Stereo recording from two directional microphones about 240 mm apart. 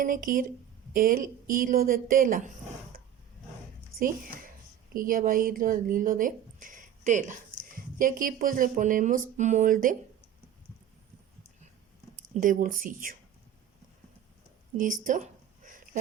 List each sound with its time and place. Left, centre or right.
0.0 s speech: right
3.9 s speech: right
12.3 s speech: right
14.8 s speech: right
15.6 s a sound: right